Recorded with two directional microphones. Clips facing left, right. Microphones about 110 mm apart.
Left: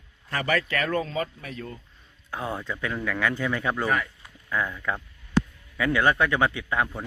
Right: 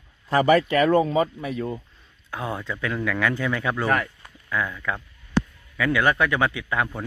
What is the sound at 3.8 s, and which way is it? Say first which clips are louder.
Speech: right 4 dB; centre (ahead or behind).